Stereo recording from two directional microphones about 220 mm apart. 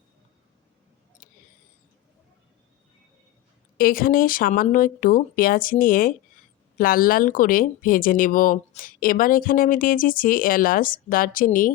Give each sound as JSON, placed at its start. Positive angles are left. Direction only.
{"t": 3.8, "sound": "speech", "side_deg": 40}